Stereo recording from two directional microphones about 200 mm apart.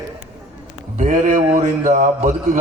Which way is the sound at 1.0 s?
40° right (ahead or behind).